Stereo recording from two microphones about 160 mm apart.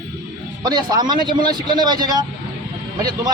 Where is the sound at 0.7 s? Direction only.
25° right (ahead or behind).